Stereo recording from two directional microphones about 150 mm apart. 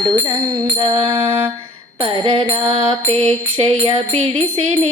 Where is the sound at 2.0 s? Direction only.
40° right (ahead or behind).